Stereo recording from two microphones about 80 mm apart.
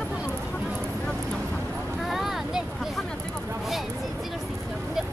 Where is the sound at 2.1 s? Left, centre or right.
Centre.